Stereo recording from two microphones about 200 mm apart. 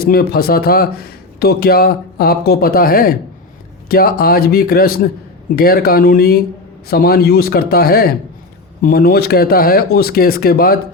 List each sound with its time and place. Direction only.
0.0 s speech: 50° left (ahead or behind)